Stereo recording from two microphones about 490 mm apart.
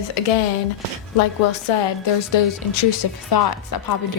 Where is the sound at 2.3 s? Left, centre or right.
Left.